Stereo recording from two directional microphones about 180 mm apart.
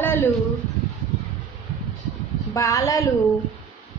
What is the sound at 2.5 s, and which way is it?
Speech, 20° left (ahead or behind).